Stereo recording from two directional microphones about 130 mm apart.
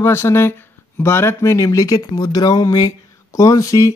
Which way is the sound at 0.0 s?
20° left (ahead or behind).